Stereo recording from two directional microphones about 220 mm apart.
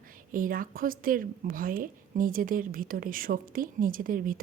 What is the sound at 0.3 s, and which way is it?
A woman's voice, 40° right (ahead or behind).